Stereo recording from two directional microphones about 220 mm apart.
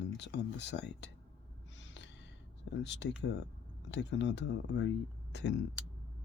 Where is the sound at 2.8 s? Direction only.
50° left (ahead or behind).